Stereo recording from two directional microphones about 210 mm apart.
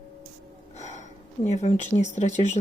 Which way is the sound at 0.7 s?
35° left (ahead or behind).